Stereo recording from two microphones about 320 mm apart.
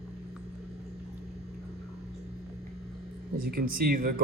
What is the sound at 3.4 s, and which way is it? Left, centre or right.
Speech, right.